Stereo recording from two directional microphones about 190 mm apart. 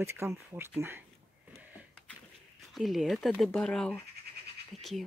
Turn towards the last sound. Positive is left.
turn(degrees=0)  # may be behind; listen again after turning